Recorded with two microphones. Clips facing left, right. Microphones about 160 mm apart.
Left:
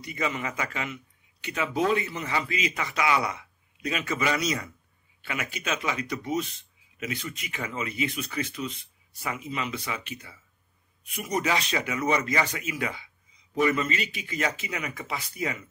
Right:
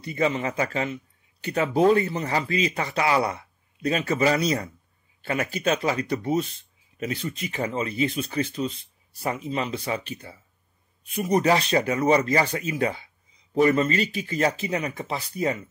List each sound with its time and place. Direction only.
0.0 s a man's voice: 30° right (ahead or behind)